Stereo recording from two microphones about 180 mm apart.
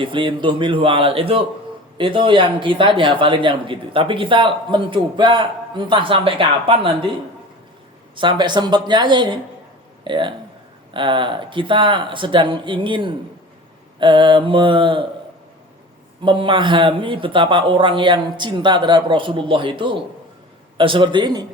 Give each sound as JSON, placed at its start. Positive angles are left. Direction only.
{"t": 0.0, "sound": "speech", "side_deg": -30}
{"t": 8.1, "sound": "speech", "side_deg": -25}
{"t": 16.2, "sound": "speech", "side_deg": -25}